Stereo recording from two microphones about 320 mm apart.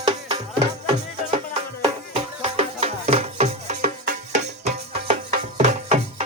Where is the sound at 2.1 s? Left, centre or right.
Centre.